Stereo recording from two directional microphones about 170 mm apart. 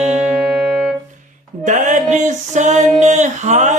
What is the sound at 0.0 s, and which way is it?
Music, 40° right (ahead or behind).